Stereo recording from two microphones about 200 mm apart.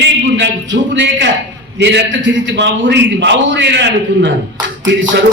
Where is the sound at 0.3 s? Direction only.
65° right (ahead or behind).